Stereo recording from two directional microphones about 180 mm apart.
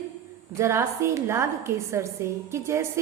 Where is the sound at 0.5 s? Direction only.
15° right (ahead or behind).